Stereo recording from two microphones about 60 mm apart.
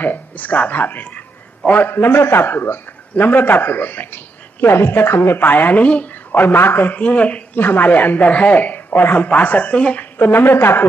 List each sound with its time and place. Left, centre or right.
0.0 s a man's voice: left
7.0 s speech: left
7.5 s speech: left
10.1 s a man's voice: left